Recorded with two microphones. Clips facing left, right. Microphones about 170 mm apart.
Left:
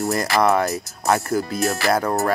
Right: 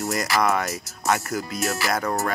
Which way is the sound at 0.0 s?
30° left (ahead or behind).